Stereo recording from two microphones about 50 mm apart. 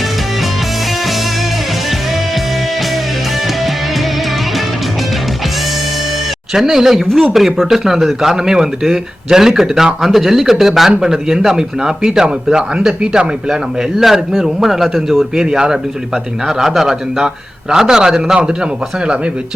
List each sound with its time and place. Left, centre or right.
6.5 s a man's voice: centre
15.4 s speech: centre
16.5 s speech: centre